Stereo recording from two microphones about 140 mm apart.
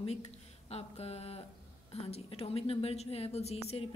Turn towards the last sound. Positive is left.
turn(degrees=50)  # may be behind; listen again after turning